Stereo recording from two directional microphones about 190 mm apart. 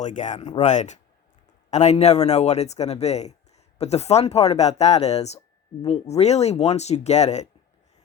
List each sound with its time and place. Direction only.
0.0 s speech: 40° left (ahead or behind)